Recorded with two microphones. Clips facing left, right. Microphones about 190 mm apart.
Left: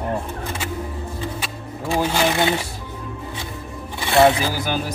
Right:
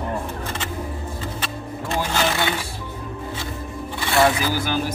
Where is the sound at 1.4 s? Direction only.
5° left (ahead or behind).